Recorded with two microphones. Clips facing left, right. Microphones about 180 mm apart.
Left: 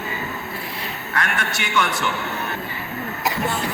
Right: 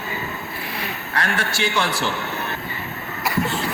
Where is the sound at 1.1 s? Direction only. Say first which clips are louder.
Right 1 dB; 35° right (ahead or behind).